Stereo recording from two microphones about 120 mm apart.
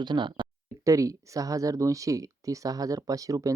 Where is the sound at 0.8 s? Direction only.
25° right (ahead or behind).